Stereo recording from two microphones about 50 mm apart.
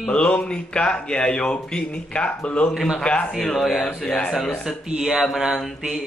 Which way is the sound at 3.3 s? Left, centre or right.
Centre.